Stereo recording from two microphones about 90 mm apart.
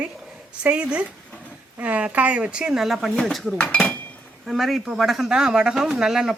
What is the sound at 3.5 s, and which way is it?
Dishes, 15° left (ahead or behind).